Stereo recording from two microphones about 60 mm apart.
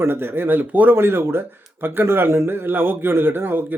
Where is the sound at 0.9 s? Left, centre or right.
Right.